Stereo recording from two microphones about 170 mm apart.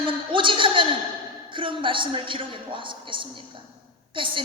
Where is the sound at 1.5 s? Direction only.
30° right (ahead or behind).